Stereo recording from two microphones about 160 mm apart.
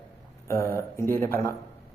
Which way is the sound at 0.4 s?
20° left (ahead or behind).